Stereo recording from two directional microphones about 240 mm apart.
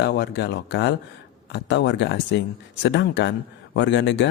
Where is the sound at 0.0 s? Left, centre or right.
Left.